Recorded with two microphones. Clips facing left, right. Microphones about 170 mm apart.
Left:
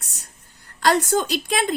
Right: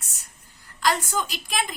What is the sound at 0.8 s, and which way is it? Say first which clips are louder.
Speech: left 6 dB; 65° left (ahead or behind).